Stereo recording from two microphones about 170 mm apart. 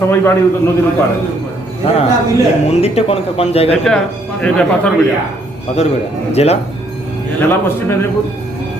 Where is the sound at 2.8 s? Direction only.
35° left (ahead or behind).